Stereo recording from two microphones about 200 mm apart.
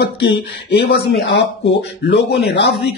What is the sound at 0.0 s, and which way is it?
Speech, 55° left (ahead or behind).